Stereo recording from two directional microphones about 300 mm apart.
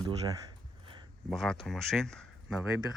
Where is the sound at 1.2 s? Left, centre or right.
Centre.